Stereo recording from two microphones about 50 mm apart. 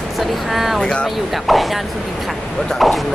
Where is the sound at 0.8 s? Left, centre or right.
Centre.